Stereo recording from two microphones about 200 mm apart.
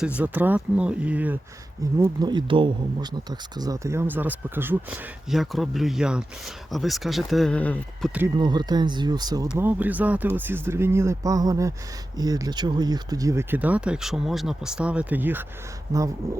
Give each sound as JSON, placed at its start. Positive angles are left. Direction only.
{"t": 0.2, "sound": "speech", "side_deg": -10}
{"t": 1.8, "sound": "speech", "side_deg": -20}
{"t": 8.4, "sound": "speech", "side_deg": -20}
{"t": 9.6, "sound": "speech", "side_deg": -10}